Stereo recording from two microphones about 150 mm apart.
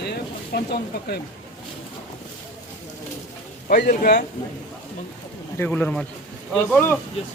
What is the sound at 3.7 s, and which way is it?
Speech, 85° left.